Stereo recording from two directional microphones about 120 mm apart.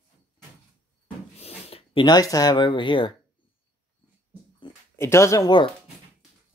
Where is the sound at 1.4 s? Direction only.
55° left (ahead or behind).